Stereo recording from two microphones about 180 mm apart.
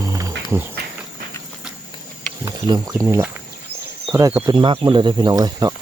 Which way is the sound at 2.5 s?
20° right (ahead or behind).